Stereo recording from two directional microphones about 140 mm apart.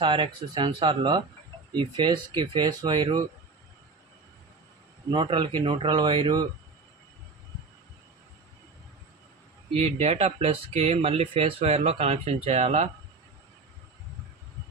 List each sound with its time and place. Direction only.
0.0 s speech: 35° right (ahead or behind)
5.1 s speech: 35° right (ahead or behind)
9.8 s speech: 50° right (ahead or behind)